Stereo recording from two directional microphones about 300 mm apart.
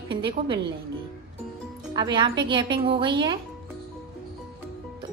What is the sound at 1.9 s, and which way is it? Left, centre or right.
A woman's voice, centre.